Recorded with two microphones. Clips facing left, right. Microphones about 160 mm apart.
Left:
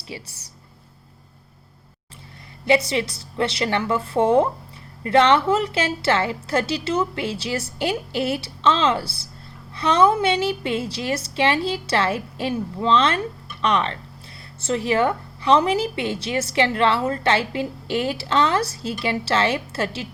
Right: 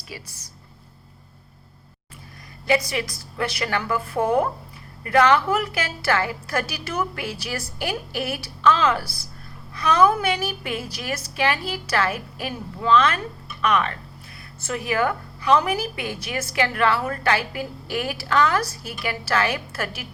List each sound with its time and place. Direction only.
0.1 s a woman's voice: 25° left (ahead or behind)
2.9 s a woman's voice: 25° left (ahead or behind)